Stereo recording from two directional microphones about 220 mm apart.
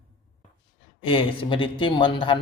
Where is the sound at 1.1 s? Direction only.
25° left (ahead or behind).